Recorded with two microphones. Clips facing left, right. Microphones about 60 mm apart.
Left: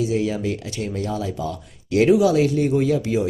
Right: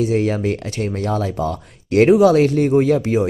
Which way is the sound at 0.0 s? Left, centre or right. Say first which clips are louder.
Right 4 dB; right.